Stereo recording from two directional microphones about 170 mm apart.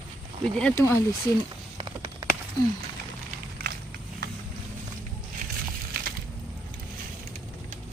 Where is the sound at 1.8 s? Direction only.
30° right (ahead or behind).